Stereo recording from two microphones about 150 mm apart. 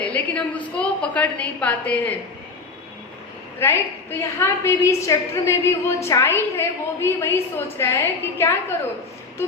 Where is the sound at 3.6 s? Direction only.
15° left (ahead or behind).